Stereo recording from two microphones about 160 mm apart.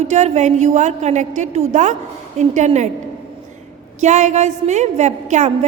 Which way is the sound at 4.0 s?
45° right (ahead or behind).